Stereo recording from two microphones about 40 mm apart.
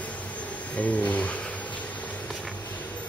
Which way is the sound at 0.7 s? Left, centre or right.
Left.